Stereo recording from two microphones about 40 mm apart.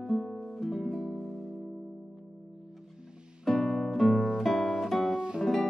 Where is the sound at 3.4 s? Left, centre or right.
Centre.